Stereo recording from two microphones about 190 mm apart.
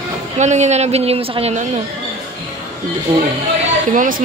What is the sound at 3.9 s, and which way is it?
Speech, 45° right (ahead or behind).